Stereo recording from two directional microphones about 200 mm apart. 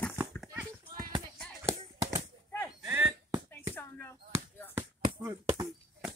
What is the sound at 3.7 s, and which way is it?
Chop, 10° left (ahead or behind).